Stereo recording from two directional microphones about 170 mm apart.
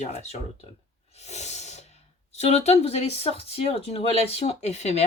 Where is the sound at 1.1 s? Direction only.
40° left (ahead or behind).